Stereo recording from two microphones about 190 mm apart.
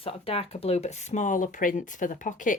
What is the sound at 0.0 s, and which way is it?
Speech, 30° left (ahead or behind).